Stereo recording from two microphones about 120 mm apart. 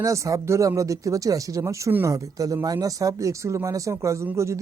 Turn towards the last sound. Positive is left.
turn(degrees=-25)  # may be behind; listen again after turning